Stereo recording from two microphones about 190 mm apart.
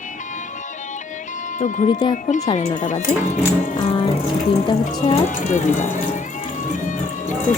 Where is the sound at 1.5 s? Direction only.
40° left (ahead or behind).